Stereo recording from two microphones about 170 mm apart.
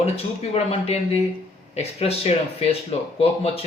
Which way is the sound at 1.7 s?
35° left (ahead or behind).